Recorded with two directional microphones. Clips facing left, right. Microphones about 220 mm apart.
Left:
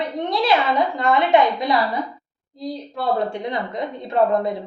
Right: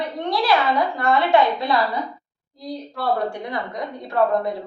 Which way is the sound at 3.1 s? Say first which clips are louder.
Left 2 dB; 25° left (ahead or behind).